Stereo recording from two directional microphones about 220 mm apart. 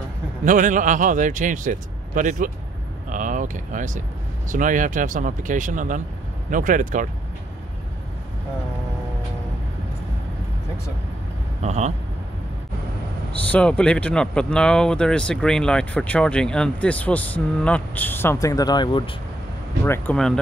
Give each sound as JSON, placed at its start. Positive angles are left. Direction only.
{"t": 0.5, "sound": "a man's voice", "side_deg": -35}
{"t": 3.1, "sound": "vehicle", "side_deg": -35}
{"t": 4.5, "sound": "a man's voice", "side_deg": -35}
{"t": 11.6, "sound": "speech", "side_deg": -30}
{"t": 13.5, "sound": "speech", "side_deg": 5}
{"t": 19.8, "sound": "speech", "side_deg": 10}